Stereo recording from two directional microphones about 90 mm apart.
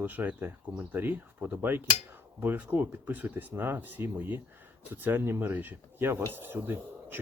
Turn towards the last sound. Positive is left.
turn(degrees=-25)  # may be behind; listen again after turning